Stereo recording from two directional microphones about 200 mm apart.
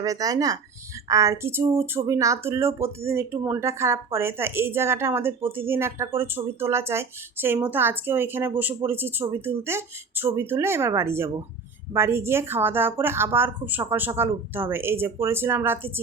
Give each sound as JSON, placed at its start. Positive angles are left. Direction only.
{"t": 0.0, "sound": "speech", "side_deg": -15}